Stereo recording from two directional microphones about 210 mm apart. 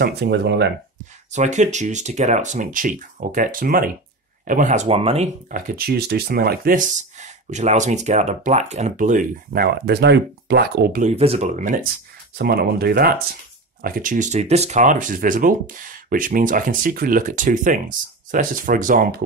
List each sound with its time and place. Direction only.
0.0 s speech: 50° right (ahead or behind)
1.3 s speech: 35° right (ahead or behind)
12.4 s speech: 45° right (ahead or behind)